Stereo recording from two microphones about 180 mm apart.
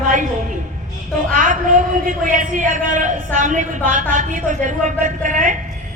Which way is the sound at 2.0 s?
45° right (ahead or behind).